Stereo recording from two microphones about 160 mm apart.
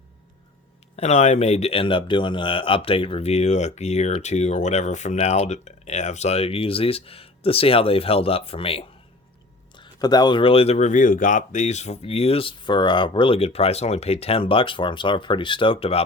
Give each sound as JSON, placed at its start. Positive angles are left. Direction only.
{"t": 0.9, "sound": "a man's voice", "side_deg": 45}